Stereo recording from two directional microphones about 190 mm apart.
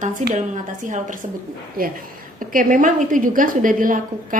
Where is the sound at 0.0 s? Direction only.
40° right (ahead or behind).